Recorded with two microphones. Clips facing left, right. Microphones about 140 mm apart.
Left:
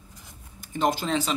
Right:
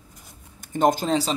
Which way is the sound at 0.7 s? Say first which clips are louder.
Right 4 dB; 45° right (ahead or behind).